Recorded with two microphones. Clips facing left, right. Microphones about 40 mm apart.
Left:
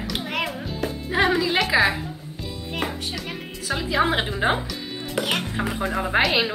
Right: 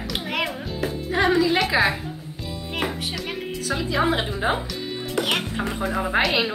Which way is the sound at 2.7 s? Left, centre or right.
Centre.